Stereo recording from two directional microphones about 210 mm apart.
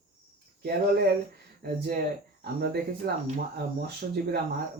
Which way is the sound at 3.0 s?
45° right (ahead or behind).